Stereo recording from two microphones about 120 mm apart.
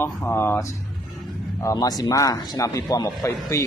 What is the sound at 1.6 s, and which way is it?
A man's voice, 30° left (ahead or behind).